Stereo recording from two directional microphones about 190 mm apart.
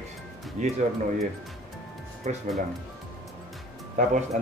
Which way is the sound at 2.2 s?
40° right (ahead or behind).